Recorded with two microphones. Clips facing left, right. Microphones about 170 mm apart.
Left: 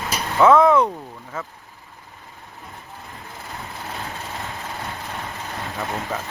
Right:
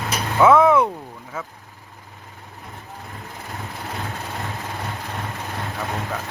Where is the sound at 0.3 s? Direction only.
5° right (ahead or behind).